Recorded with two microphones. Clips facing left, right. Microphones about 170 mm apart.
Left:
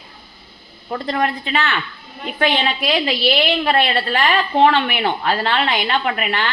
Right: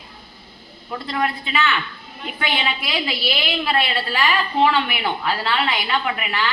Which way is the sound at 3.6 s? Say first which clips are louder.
Left 4 dB; 50° left (ahead or behind).